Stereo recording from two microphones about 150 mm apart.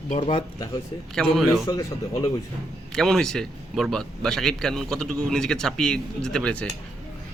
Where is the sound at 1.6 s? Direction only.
20° left (ahead or behind).